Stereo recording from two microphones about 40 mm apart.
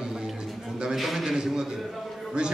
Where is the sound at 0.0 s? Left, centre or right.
Centre.